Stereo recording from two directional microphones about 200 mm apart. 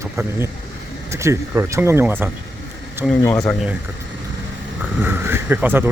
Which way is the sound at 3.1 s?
5° left (ahead or behind).